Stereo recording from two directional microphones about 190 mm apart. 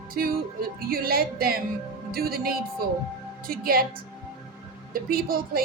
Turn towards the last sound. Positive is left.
turn(degrees=-50)  # may be behind; listen again after turning